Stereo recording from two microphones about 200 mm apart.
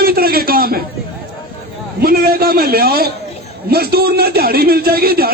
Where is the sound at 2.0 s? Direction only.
50° right (ahead or behind).